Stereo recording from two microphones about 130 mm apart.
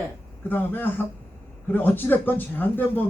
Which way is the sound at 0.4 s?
15° left (ahead or behind).